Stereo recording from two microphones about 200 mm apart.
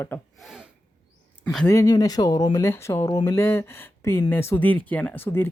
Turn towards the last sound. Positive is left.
turn(degrees=10)  # may be behind; listen again after turning